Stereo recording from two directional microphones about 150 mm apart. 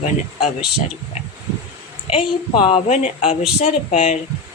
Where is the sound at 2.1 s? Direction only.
40° left (ahead or behind).